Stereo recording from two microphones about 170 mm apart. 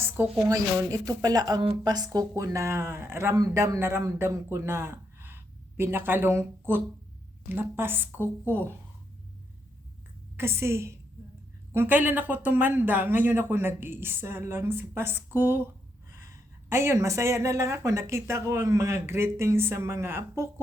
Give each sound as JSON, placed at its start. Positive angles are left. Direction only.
{"t": 0.0, "sound": "speech", "side_deg": -20}
{"t": 10.3, "sound": "speech", "side_deg": -15}
{"t": 16.6, "sound": "speech", "side_deg": -15}